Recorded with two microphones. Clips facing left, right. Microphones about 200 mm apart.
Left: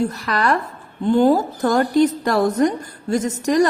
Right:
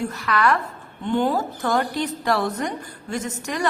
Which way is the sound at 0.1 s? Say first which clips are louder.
Left 1 dB; 35° left (ahead or behind).